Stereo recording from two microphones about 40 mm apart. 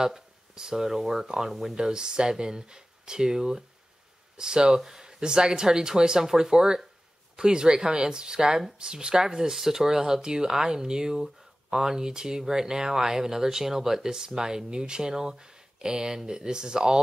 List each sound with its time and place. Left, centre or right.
0.0 s speech: centre
1.8 s speech: centre